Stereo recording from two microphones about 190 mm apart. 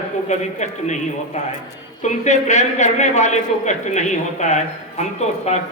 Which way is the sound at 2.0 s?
40° left (ahead or behind).